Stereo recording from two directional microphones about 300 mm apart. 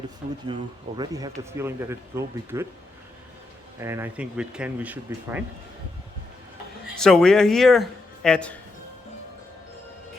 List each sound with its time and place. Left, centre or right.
0.2 s speech: right
0.9 s speech: centre
3.8 s speech: centre
7.0 s speech: centre